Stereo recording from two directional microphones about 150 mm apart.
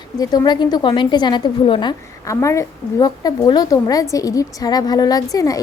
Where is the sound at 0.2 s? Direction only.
25° left (ahead or behind).